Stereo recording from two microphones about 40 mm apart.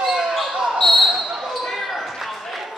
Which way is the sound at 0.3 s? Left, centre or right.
Centre.